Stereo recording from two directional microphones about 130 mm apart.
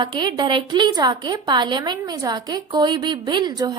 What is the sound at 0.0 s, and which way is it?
A woman's voice, 35° right (ahead or behind).